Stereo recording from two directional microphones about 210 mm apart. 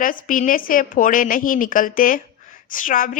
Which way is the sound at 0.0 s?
40° left (ahead or behind).